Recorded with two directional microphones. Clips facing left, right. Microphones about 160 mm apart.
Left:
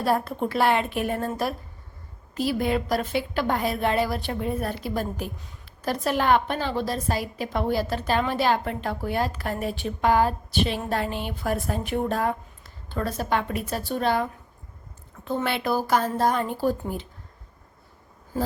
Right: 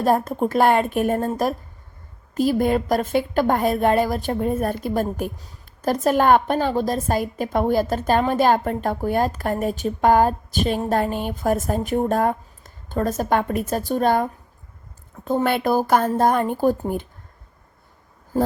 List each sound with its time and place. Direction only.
0.0 s a woman's voice: 45° right (ahead or behind)